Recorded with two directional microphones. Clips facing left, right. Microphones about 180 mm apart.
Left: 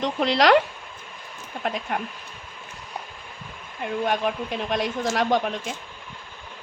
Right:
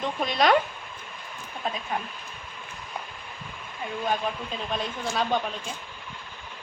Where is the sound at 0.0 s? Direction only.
80° left.